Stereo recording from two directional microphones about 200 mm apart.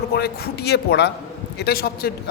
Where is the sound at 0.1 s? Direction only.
50° left (ahead or behind).